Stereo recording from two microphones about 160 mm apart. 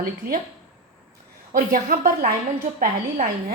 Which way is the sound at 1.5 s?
65° right (ahead or behind).